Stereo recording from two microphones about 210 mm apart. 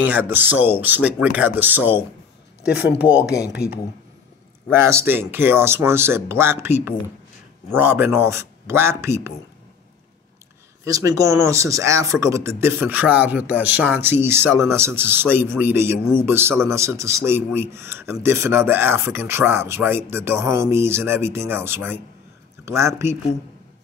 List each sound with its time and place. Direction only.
0.0 s speech: 10° right (ahead or behind)
4.8 s speech: 10° right (ahead or behind)
10.8 s speech: 15° right (ahead or behind)